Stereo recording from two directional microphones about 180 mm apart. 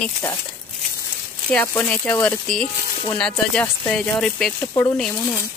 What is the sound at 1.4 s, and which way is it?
Speech, 10° left (ahead or behind).